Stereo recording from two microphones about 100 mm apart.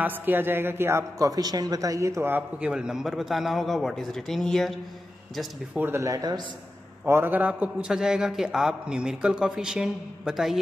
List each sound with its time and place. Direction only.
0.0 s a man's voice: 20° right (ahead or behind)
2.6 s a man's voice: 10° right (ahead or behind)
5.8 s a man's voice: 20° right (ahead or behind)
6.0 s a man's voice: 40° right (ahead or behind)
7.1 s a man's voice: 20° right (ahead or behind); by 10.6 s 5° right (ahead or behind)